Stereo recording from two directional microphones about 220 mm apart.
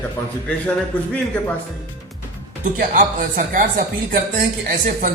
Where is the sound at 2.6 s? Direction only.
35° right (ahead or behind).